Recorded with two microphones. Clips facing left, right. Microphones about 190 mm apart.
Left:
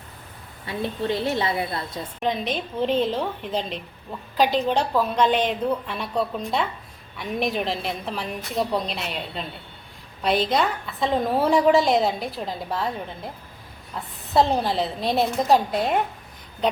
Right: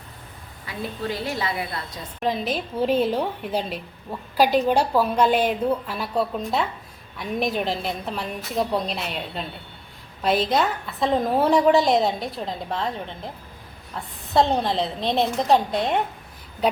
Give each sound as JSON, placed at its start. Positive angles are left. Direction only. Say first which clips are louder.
{"t": 0.6, "sound": "a woman's voice", "louder": "left 3 dB", "side_deg": 25}
{"t": 2.2, "sound": "a woman's voice", "louder": "right 1 dB", "side_deg": -5}
{"t": 14.3, "sound": "a woman's voice", "louder": "even", "side_deg": 0}